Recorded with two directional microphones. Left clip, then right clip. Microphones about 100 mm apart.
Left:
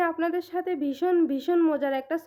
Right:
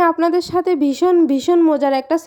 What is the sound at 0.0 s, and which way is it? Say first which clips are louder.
Speech: right 11 dB; 60° right (ahead or behind).